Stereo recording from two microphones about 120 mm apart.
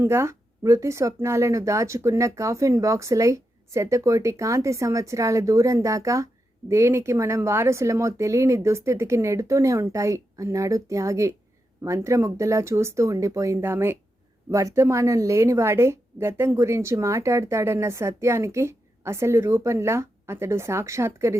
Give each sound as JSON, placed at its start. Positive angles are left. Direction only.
{"t": 0.0, "sound": "a woman's voice", "side_deg": -20}